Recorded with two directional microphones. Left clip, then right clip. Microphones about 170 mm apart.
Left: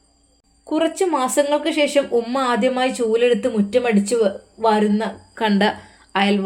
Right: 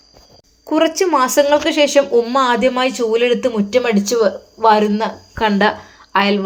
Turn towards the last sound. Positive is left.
turn(degrees=10)  # may be behind; listen again after turning